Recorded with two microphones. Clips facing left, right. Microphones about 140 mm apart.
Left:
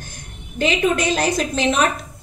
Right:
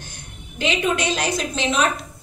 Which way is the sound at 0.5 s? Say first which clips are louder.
Left 3 dB; 45° left (ahead or behind).